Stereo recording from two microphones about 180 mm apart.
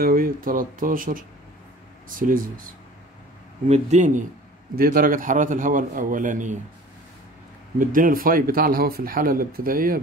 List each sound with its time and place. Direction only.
0.0 s speech: 50° right (ahead or behind)
3.6 s speech: 40° right (ahead or behind)
4.7 s speech: 50° right (ahead or behind)
7.8 s speech: 50° right (ahead or behind)